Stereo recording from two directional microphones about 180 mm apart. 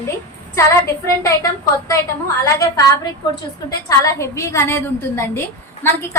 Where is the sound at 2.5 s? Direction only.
20° left (ahead or behind).